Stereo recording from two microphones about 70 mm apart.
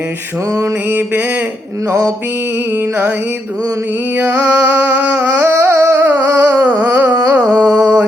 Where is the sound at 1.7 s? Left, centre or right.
Right.